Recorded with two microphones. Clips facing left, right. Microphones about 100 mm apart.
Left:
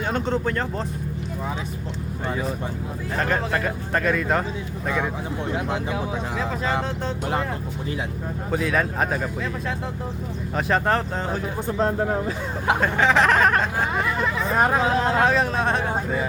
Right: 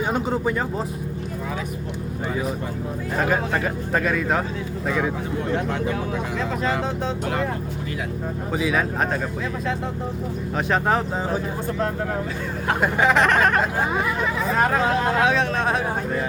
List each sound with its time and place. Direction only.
0.1 s speech: 10° right (ahead or behind)
3.2 s speech: 5° right (ahead or behind)
8.5 s speech: centre (ahead or behind)
10.7 s speech: centre (ahead or behind)
11.8 s speech: 25° left (ahead or behind)
12.8 s speech: 5° right (ahead or behind)
14.6 s speech: 20° left (ahead or behind)
15.2 s speech: centre (ahead or behind)